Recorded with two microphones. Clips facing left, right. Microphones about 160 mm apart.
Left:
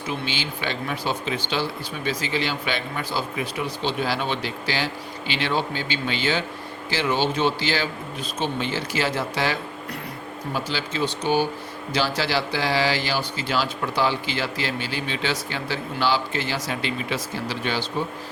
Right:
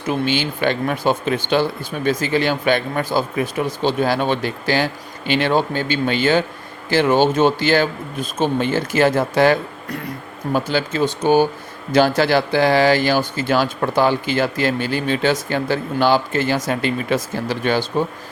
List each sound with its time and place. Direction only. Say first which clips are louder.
0.0 s speech: right 9 dB; 50° right (ahead or behind)